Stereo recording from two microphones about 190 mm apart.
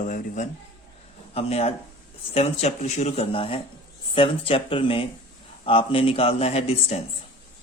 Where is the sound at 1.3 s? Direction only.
30° left (ahead or behind).